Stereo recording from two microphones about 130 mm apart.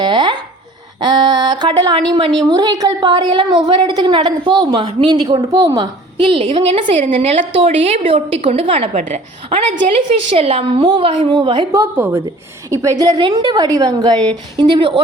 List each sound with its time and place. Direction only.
0.0 s a sound: 35° right (ahead or behind)
1.0 s a woman's voice: 35° right (ahead or behind)
8.9 s a woman's voice: 65° right (ahead or behind)
10.3 s a woman's voice: 50° right (ahead or behind)
11.8 s a woman's voice: 20° right (ahead or behind); by 15.0 s 35° right (ahead or behind)